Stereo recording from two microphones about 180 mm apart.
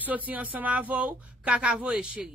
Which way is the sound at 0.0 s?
10° right (ahead or behind).